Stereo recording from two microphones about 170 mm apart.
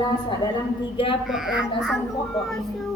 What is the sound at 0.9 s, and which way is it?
Speech, 30° left (ahead or behind).